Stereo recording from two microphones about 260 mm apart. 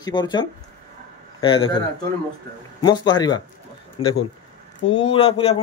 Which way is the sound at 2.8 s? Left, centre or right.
Centre.